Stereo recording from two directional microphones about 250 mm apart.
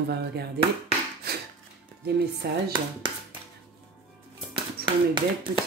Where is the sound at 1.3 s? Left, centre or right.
Right.